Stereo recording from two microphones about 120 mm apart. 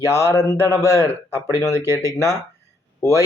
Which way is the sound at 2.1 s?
25° left (ahead or behind).